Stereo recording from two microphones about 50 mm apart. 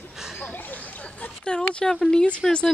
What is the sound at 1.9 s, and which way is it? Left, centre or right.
Speech, centre.